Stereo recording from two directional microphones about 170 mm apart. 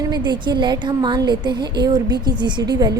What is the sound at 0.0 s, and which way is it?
A woman's voice, 25° right (ahead or behind).